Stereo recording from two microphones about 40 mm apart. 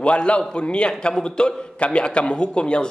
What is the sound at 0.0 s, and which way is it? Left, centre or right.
A man's voice, left.